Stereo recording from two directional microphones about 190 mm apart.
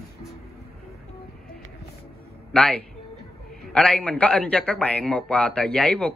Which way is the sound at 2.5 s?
5° left (ahead or behind).